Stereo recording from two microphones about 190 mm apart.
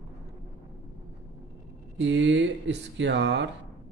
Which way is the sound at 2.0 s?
70° right (ahead or behind).